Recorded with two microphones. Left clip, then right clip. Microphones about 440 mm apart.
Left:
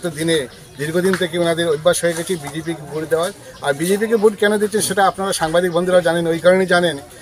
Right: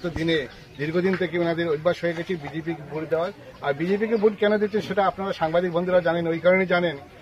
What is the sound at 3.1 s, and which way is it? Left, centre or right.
Speech, right.